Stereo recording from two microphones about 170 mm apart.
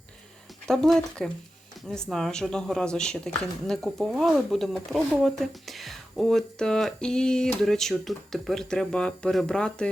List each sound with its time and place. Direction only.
0.6 s speech: 5° left (ahead or behind)